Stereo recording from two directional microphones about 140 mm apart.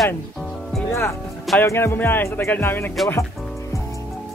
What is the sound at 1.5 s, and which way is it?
Speech, 15° left (ahead or behind).